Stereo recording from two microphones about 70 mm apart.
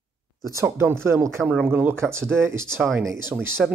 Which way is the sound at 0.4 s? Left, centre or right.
Right.